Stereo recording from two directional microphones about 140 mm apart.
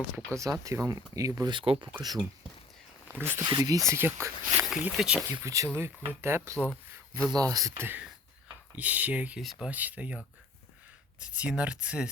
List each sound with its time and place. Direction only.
0.3 s speech: 25° right (ahead or behind)
3.1 s speech: 15° right (ahead or behind)
3.4 s speech: 30° right (ahead or behind)
4.7 s speech: 5° right (ahead or behind)
5.3 s speech: 20° right (ahead or behind)